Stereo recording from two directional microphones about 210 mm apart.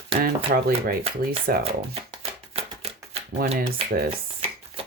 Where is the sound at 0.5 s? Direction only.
45° right (ahead or behind).